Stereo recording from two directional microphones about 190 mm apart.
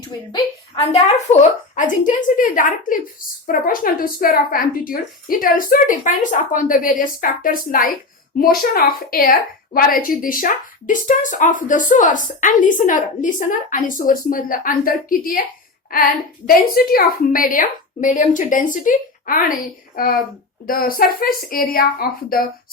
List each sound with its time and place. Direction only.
0.8 s a woman's voice: 35° left (ahead or behind)
20.7 s a woman's voice: 50° left (ahead or behind)